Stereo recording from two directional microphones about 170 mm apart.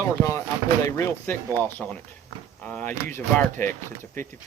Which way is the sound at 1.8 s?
5° left (ahead or behind).